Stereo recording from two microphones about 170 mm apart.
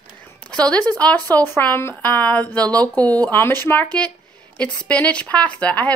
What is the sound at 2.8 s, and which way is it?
Speech, 20° right (ahead or behind).